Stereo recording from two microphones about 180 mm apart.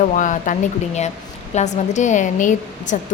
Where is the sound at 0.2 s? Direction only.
45° left (ahead or behind).